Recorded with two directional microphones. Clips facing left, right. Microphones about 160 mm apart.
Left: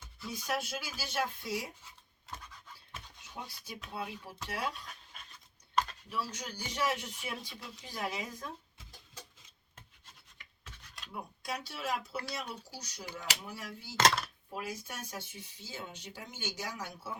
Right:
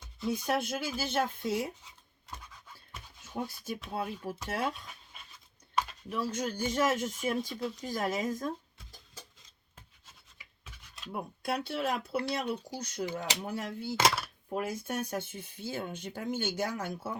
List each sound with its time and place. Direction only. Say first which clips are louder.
0.3 s speech: right 6 dB; 55° right (ahead or behind)
3.3 s speech: right 9 dB; 50° right (ahead or behind)
5.7 s a sound: even; 5° right (ahead or behind)
6.1 s speech: right 6 dB; 50° right (ahead or behind)
10.3 s rub: even; 10° right (ahead or behind)
11.1 s speech: right 6 dB; 60° right (ahead or behind)
13.9 s speech: even; 10° right (ahead or behind)
14.5 s speech: right 8 dB; 55° right (ahead or behind)